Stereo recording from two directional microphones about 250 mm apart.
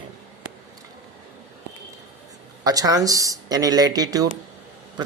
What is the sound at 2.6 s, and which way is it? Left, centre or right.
Speech, centre.